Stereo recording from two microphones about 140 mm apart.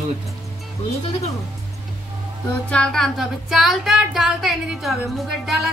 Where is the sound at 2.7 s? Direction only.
5° left (ahead or behind).